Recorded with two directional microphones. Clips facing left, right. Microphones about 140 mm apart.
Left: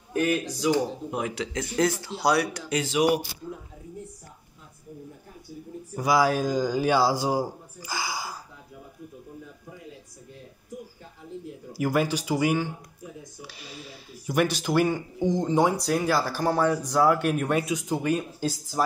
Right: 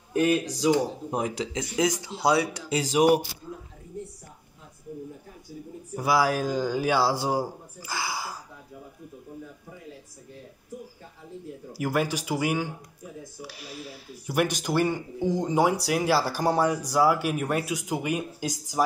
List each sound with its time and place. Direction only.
0.1 s speech: 25° right (ahead or behind)
1.5 s speech: 15° right (ahead or behind)
2.8 s speech: 40° right (ahead or behind)
5.9 s a man's voice: 5° right (ahead or behind)
11.8 s speech: 5° right (ahead or behind)